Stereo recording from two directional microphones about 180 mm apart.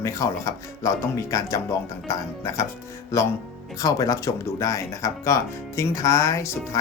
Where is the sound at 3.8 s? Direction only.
20° left (ahead or behind).